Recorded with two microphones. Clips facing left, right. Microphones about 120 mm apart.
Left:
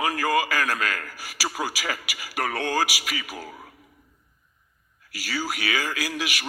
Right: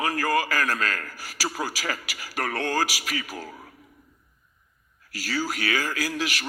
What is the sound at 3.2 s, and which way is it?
Speech, 15° left (ahead or behind).